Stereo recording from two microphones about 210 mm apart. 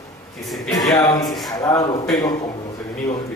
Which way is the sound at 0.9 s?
20° left (ahead or behind).